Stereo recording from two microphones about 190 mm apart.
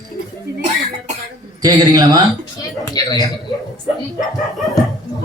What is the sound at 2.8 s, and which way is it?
Speech, 20° left (ahead or behind).